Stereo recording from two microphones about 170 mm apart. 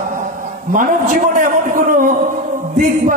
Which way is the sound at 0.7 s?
50° right (ahead or behind).